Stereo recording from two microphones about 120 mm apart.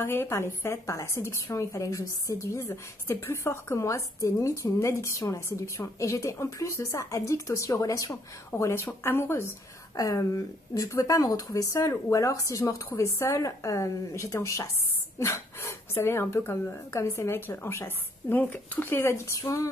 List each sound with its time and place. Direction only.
0.0 s a woman's voice: 20° left (ahead or behind)